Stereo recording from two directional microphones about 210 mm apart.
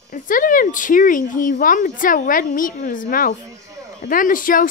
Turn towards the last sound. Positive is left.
turn(degrees=40)  # may be behind; listen again after turning